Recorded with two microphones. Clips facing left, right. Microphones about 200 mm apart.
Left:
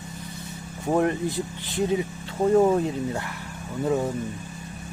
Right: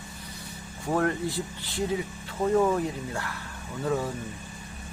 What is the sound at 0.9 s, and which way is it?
Speech, 20° left (ahead or behind).